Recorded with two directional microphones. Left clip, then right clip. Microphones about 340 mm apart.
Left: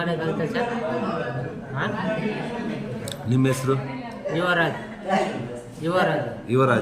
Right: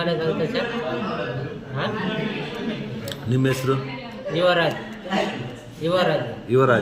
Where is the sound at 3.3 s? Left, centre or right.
Centre.